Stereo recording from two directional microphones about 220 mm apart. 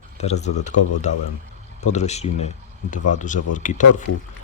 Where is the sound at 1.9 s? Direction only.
30° left (ahead or behind).